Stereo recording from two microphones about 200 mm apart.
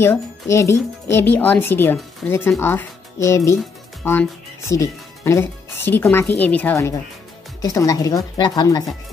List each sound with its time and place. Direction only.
0.0 s speech: 15° left (ahead or behind)